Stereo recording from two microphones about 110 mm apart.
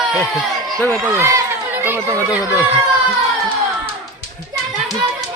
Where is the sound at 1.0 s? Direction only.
25° right (ahead or behind).